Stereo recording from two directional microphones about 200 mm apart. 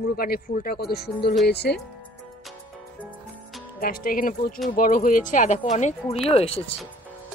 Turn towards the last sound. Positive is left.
turn(degrees=30)  # may be behind; listen again after turning